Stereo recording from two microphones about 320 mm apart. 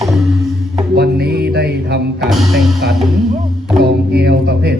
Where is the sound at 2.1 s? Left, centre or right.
Centre.